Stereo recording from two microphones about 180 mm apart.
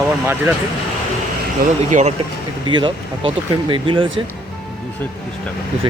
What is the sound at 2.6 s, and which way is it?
Speech, 25° right (ahead or behind).